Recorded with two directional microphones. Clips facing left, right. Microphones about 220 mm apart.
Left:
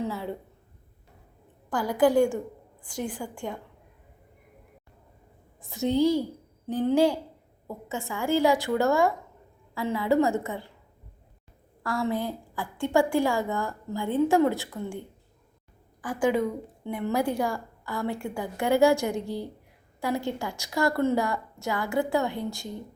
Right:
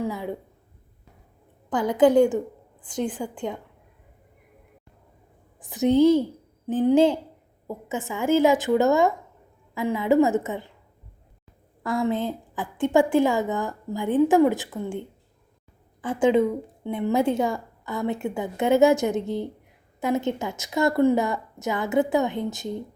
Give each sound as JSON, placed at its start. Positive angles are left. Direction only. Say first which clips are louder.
{"t": 0.0, "sound": "a woman's voice", "louder": "right 3 dB", "side_deg": -15}
{"t": 1.7, "sound": "a woman's voice", "louder": "right 4 dB", "side_deg": -20}
{"t": 5.5, "sound": "a woman's voice", "louder": "right 5 dB", "side_deg": -15}
{"t": 11.8, "sound": "a woman's voice", "louder": "right 4 dB", "side_deg": -20}
{"t": 16.0, "sound": "a woman's voice", "louder": "right 5 dB", "side_deg": -25}